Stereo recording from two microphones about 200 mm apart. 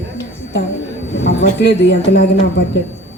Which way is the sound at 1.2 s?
60° left (ahead or behind).